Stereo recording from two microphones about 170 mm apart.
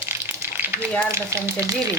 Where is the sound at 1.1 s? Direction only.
15° right (ahead or behind).